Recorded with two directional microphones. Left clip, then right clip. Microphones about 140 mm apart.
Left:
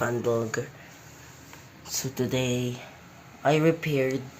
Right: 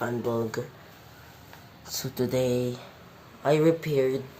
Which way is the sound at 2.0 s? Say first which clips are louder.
Right 1 dB; centre (ahead or behind).